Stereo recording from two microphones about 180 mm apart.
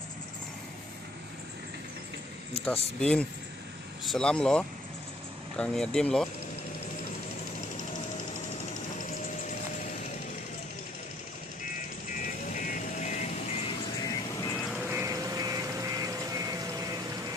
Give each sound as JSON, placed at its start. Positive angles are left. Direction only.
{"t": 3.0, "sound": "speech", "side_deg": 5}
{"t": 12.1, "sound": "vehicle", "side_deg": 45}
{"t": 14.0, "sound": "music", "side_deg": 20}
{"t": 14.7, "sound": "duck", "side_deg": 0}
{"t": 14.9, "sound": "a sound", "side_deg": -20}